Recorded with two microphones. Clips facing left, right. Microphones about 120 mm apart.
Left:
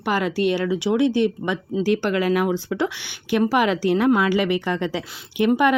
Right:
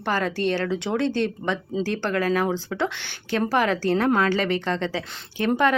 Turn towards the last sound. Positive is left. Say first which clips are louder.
# left 3 dB
turn(degrees=15)  # may be behind; listen again after turning